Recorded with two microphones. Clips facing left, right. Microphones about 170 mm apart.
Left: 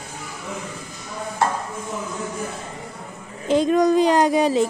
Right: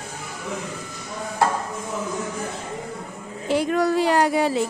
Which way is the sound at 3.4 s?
20° left (ahead or behind).